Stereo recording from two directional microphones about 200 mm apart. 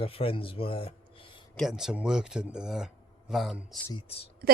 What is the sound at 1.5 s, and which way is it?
Speech, centre (ahead or behind).